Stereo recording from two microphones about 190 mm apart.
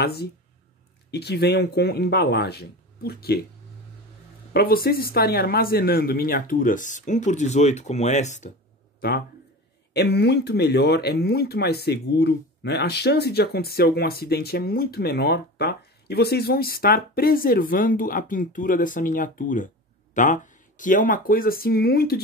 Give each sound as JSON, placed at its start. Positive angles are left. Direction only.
{"t": 0.0, "sound": "speech", "side_deg": 55}
{"t": 4.6, "sound": "speech", "side_deg": 50}
{"t": 9.9, "sound": "speech", "side_deg": 60}